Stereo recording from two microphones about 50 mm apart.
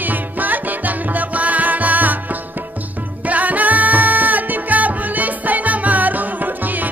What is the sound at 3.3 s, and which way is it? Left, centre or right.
Music, right.